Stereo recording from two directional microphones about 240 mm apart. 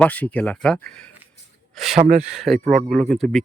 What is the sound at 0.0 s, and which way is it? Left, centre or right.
Speech, centre.